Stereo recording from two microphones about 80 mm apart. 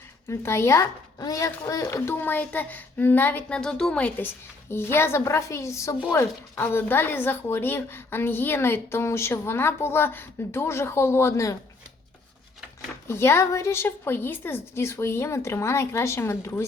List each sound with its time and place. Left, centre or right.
0.3 s a woman's voice: left
1.2 s speech: left
2.0 s a woman's voice: left
3.6 s speech: centre
4.7 s a woman's voice: left
6.1 s a woman's voice: left
13.1 s a woman's voice: left